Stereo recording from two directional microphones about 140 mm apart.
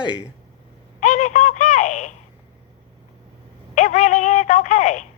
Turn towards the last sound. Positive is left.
turn(degrees=60)  # may be behind; listen again after turning